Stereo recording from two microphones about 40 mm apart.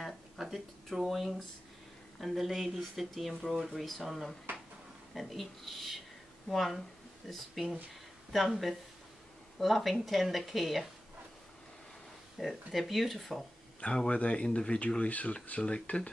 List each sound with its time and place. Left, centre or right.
0.0 s a sound: centre
1.0 s speech: centre
12.4 s speech: centre
14.1 s speech: left